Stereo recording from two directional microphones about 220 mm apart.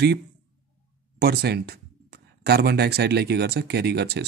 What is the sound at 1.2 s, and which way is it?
Speech, 45° right (ahead or behind).